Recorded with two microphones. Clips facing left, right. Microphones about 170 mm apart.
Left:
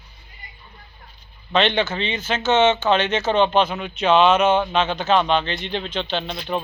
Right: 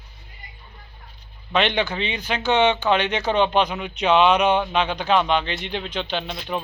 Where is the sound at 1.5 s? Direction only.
15° right (ahead or behind).